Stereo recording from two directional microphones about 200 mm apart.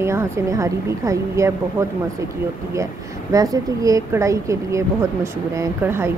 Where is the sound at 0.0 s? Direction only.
15° right (ahead or behind).